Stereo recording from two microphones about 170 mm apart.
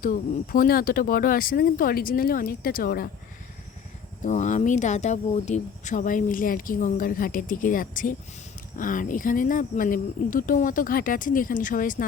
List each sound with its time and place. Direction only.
0.0 s speech: 55° left (ahead or behind)
4.2 s speech: 45° left (ahead or behind)